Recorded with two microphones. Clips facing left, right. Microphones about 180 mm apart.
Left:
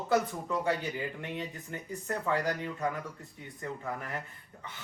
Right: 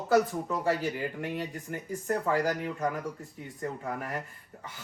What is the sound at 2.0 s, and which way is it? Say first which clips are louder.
Speech: right 3 dB; 35° right (ahead or behind).